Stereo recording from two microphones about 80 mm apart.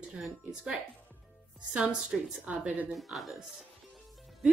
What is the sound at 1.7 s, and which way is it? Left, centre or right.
A woman's voice, centre.